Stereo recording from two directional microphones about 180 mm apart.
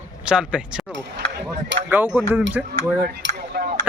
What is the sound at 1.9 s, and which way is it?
Speech, 10° right (ahead or behind).